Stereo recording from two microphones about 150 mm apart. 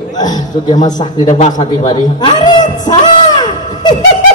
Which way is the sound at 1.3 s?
50° left (ahead or behind).